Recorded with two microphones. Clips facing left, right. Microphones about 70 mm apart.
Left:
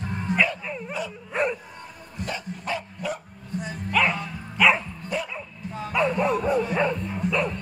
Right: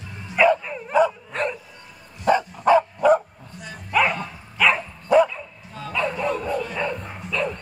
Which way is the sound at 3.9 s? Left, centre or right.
Centre.